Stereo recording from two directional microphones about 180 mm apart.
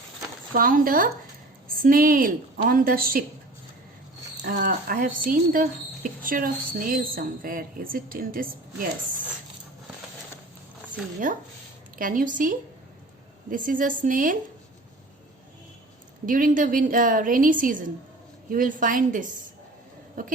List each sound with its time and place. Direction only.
0.5 s speech: 50° right (ahead or behind)
4.4 s speech: 50° right (ahead or behind)
11.2 s speech: 50° right (ahead or behind)
16.2 s speech: 50° right (ahead or behind)